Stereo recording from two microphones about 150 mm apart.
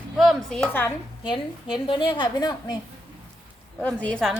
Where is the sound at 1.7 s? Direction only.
35° left (ahead or behind).